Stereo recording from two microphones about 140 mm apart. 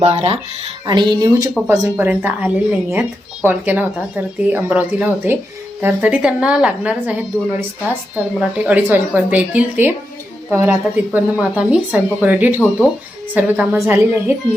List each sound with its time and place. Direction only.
0.0 s speech: 45° right (ahead or behind)
0.9 s speech: 30° right (ahead or behind)